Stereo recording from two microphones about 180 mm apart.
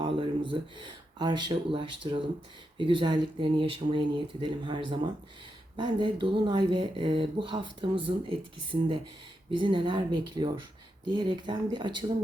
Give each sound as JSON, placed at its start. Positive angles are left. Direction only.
{"t": 0.0, "sound": "speech", "side_deg": -25}